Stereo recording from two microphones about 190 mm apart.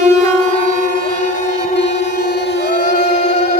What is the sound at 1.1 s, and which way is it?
Music, 40° left (ahead or behind).